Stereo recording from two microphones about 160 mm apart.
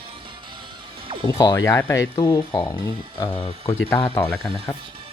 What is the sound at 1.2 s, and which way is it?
Speech, 25° left (ahead or behind).